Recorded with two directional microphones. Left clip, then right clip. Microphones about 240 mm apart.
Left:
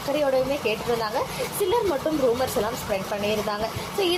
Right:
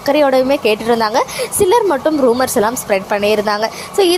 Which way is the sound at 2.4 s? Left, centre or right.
Right.